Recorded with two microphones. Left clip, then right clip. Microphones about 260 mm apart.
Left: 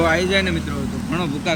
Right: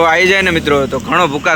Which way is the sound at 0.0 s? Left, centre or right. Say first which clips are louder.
Right 9 dB; centre.